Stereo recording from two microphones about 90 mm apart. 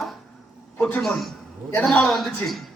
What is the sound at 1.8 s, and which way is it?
Speech, 5° left (ahead or behind).